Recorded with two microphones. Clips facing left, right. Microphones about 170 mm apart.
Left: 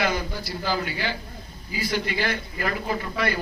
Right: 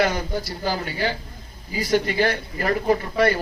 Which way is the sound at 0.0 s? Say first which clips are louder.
Right 4 dB; 40° right (ahead or behind).